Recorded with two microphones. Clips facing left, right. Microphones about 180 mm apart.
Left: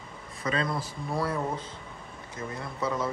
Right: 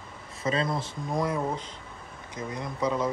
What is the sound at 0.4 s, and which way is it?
Speech, 25° right (ahead or behind).